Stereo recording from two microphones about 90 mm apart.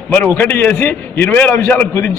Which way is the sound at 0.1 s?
20° left (ahead or behind).